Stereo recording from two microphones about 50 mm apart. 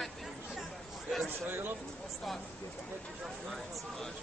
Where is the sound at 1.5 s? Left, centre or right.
Right.